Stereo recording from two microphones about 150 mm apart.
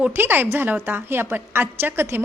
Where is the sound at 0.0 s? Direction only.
15° right (ahead or behind).